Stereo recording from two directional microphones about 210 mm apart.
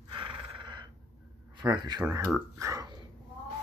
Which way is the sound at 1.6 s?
20° right (ahead or behind).